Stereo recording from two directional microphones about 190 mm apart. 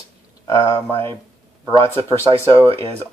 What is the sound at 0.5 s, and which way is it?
Speech, 15° left (ahead or behind).